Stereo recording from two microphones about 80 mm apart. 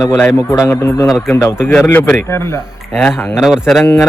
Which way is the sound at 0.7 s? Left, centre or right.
Left.